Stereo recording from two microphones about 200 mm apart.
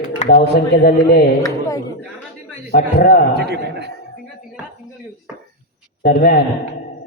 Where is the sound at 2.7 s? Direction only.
45° left (ahead or behind).